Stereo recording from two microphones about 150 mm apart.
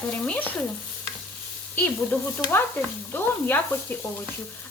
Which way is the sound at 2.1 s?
10° left (ahead or behind).